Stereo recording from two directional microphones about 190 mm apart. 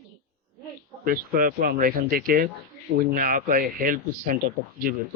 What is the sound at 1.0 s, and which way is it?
Speech, 50° right (ahead or behind).